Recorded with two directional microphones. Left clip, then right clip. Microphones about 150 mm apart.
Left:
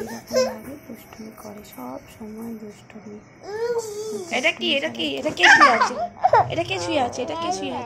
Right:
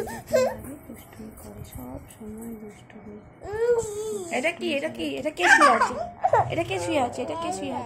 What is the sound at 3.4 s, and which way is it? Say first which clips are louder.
Speech: right 2 dB; 35° right (ahead or behind).